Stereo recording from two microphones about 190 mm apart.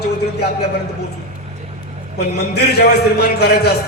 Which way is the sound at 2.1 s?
60° left (ahead or behind).